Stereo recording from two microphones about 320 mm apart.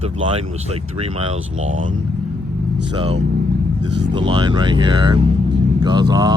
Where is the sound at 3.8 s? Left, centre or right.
Right.